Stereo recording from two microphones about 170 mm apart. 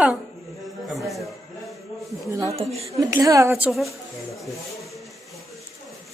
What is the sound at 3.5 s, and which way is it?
Speech, 5° right (ahead or behind).